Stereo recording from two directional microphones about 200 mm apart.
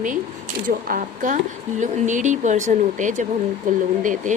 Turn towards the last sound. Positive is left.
turn(degrees=-40)  # may be behind; listen again after turning